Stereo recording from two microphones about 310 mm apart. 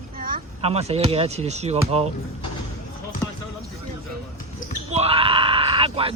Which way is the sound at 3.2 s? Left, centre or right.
Centre.